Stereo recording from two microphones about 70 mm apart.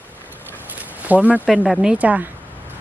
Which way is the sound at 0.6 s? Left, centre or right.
Right.